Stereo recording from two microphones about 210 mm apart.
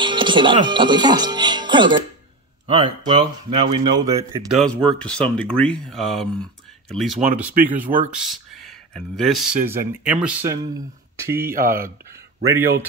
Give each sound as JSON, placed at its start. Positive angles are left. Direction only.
{"t": 0.0, "sound": "speech", "side_deg": -20}
{"t": 4.5, "sound": "speech", "side_deg": 0}
{"t": 7.6, "sound": "speech", "side_deg": -10}
{"t": 11.5, "sound": "speech", "side_deg": -40}
{"t": 12.4, "sound": "speech", "side_deg": -10}